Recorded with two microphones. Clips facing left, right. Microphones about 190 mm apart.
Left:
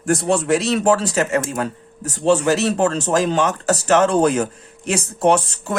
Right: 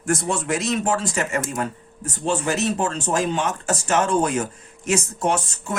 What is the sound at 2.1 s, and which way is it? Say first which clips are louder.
Speech: left 8 dB; 70° left (ahead or behind).